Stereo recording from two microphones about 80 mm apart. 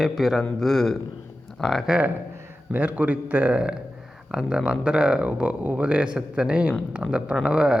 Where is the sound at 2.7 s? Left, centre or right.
Right.